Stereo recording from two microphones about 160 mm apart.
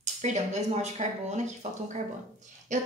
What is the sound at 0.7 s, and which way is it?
A woman's voice, 45° right (ahead or behind).